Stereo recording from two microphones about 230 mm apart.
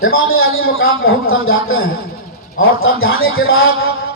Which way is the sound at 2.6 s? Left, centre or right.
Left.